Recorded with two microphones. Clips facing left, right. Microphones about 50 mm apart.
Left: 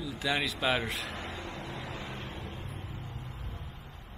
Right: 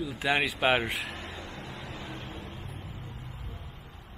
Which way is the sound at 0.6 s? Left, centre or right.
Right.